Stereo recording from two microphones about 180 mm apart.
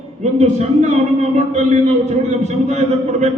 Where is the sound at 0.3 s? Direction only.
40° right (ahead or behind).